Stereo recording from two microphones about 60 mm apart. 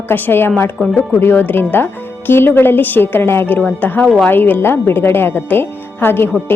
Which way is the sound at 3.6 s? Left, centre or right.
Left.